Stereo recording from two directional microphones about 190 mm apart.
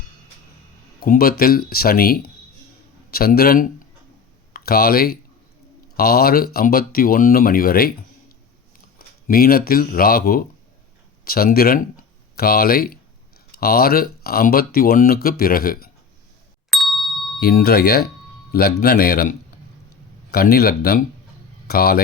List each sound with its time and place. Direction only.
0.9 s speech: 50° left (ahead or behind)
9.0 s speech: 50° left (ahead or behind)
16.6 s ding: centre (ahead or behind)
17.4 s speech: 55° left (ahead or behind)